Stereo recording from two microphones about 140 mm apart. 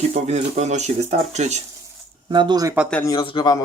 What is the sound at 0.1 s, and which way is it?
Speech, 55° right (ahead or behind).